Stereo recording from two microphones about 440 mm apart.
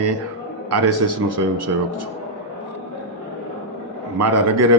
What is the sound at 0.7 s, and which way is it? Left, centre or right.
A man's voice, right.